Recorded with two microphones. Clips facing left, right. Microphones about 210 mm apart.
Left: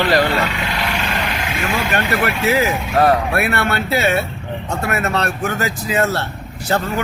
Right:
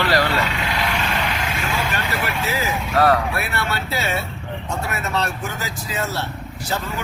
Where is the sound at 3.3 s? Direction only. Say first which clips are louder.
Left 7 dB; 60° left (ahead or behind).